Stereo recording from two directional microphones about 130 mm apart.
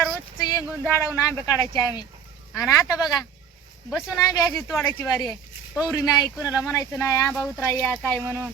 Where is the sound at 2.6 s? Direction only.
25° left (ahead or behind).